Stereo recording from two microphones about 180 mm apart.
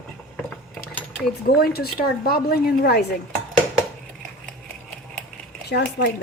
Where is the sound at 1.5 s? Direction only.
60° left (ahead or behind).